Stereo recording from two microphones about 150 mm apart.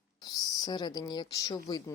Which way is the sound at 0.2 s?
25° left (ahead or behind).